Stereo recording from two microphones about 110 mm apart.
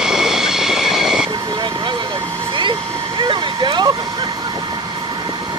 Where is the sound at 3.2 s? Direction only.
45° right (ahead or behind).